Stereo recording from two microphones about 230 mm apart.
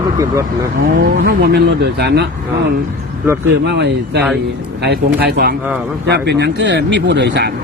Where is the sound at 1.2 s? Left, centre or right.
Right.